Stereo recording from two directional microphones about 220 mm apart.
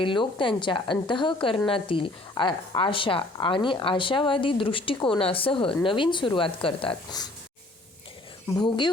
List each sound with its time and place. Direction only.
0.0 s speech: 20° left (ahead or behind)
8.5 s speech: 20° left (ahead or behind)